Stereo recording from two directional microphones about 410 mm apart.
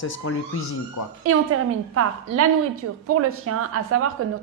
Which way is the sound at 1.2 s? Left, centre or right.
Right.